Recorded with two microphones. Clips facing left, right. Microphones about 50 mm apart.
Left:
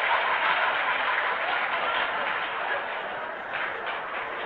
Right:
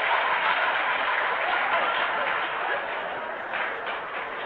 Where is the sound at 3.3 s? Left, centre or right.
Centre.